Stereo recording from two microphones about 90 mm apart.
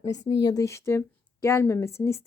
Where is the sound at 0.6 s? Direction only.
30° left (ahead or behind).